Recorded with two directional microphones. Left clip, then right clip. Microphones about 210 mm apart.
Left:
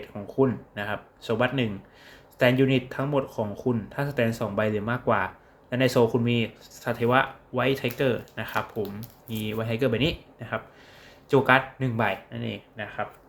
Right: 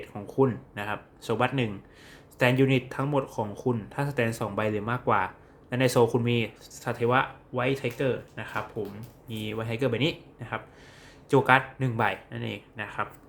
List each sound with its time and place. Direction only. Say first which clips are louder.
0.0 s speech: left 1 dB; 10° right (ahead or behind)